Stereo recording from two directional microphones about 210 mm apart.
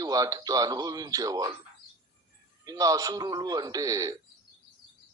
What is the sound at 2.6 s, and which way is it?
Speech, 15° right (ahead or behind).